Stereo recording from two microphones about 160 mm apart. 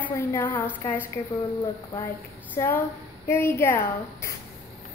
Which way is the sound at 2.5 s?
10° left (ahead or behind).